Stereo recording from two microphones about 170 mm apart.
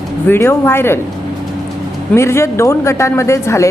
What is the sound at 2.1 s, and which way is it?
Speech, 15° left (ahead or behind).